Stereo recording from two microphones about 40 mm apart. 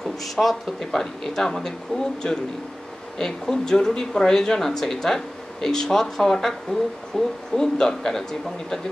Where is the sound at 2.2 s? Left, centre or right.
Left.